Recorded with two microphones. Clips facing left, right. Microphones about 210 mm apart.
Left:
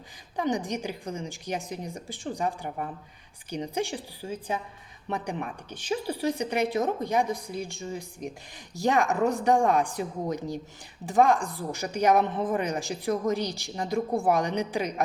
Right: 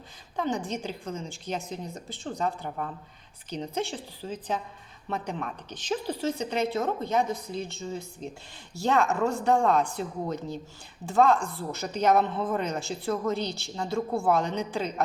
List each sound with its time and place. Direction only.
0.3 s speech: 15° left (ahead or behind)